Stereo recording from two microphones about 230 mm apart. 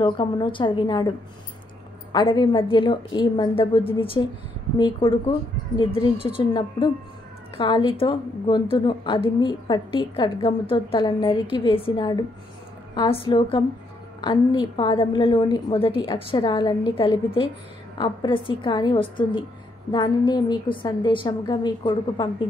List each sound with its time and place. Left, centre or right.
0.0 s a woman's voice: left
2.1 s a woman's voice: centre